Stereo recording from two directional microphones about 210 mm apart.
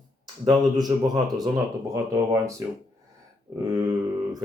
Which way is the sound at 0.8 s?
20° right (ahead or behind).